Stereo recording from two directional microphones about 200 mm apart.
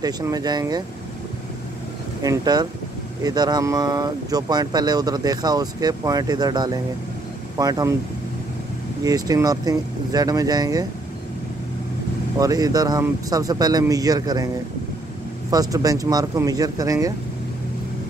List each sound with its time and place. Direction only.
0.0 s speech: 20° right (ahead or behind)
2.2 s speech: 20° right (ahead or behind)
9.0 s speech: 20° right (ahead or behind)
12.4 s speech: 20° right (ahead or behind)
15.5 s speech: 20° right (ahead or behind)